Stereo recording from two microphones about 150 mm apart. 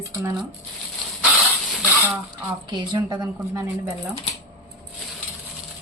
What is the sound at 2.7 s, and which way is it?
Speech, 30° right (ahead or behind).